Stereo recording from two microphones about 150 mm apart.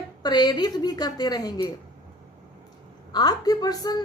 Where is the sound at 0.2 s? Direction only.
30° left (ahead or behind).